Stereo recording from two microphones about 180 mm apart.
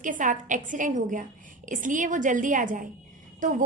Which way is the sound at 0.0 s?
45° right (ahead or behind).